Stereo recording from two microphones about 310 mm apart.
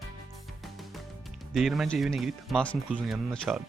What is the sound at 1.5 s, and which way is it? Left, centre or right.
Speech, centre.